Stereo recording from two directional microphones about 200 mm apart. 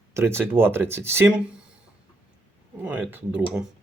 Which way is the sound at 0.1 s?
10° right (ahead or behind).